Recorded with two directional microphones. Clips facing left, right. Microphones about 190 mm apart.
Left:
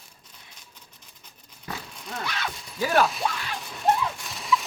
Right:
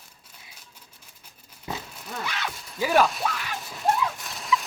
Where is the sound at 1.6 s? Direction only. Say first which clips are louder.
Right 2 dB; 20° right (ahead or behind).